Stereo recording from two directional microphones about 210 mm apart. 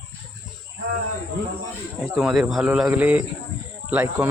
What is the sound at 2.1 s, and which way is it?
Speech, centre (ahead or behind).